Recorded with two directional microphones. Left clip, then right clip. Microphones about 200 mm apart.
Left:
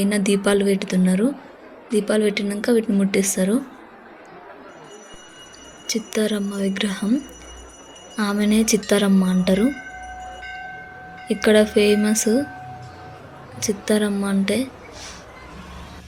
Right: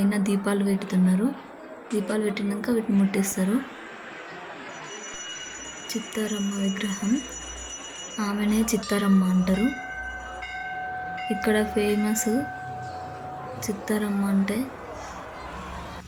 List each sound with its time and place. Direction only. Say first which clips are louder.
0.0 s a woman's voice: left 6 dB; 15° left (ahead or behind)
5.9 s a woman's voice: left 8 dB; 15° left (ahead or behind)
8.1 s a woman's voice: left 6 dB; 15° left (ahead or behind)
11.3 s a woman's voice: left 9 dB; 15° left (ahead or behind)
13.6 s a woman's voice: left 9 dB; 15° left (ahead or behind)